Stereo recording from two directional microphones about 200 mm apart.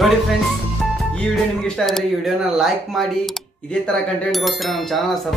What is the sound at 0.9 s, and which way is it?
Speech, centre (ahead or behind).